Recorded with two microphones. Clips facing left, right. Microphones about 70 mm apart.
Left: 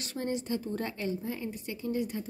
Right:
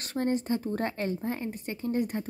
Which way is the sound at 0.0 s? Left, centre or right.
Right.